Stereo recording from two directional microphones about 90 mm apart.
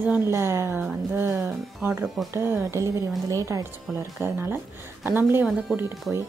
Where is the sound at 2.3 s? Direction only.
30° right (ahead or behind).